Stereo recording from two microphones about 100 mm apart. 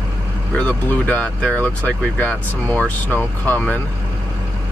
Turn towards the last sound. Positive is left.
turn(degrees=15)  # may be behind; listen again after turning